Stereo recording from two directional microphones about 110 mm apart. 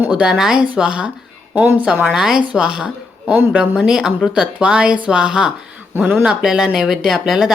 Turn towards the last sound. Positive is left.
turn(degrees=-5)  # may be behind; listen again after turning